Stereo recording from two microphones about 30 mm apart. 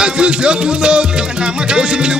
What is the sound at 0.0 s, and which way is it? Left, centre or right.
Music, right.